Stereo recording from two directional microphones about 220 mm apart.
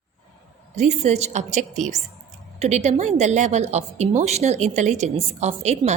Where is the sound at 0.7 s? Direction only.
30° right (ahead or behind).